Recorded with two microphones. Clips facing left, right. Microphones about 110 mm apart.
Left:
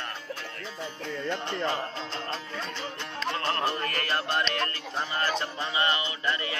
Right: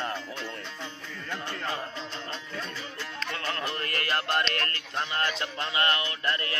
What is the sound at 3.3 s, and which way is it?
Music, 35° left (ahead or behind).